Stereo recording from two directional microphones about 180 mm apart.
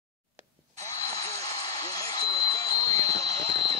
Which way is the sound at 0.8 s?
20° left (ahead or behind).